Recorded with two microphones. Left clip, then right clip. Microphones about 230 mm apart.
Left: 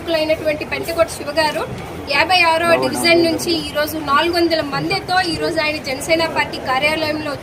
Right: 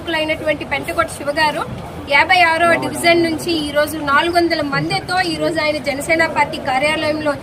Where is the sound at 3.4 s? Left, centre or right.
Right.